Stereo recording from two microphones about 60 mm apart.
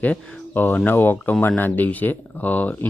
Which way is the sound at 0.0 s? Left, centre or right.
Left.